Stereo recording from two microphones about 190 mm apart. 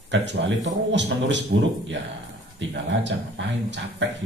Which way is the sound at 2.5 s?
70° right (ahead or behind).